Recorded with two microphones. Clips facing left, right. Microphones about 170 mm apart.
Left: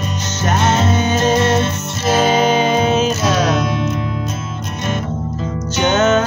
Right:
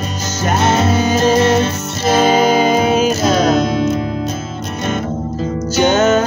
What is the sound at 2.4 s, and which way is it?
Music, 10° right (ahead or behind).